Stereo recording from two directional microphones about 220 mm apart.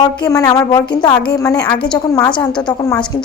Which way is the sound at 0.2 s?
15° left (ahead or behind).